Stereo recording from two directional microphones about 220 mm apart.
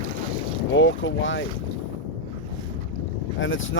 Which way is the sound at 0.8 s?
60° left (ahead or behind).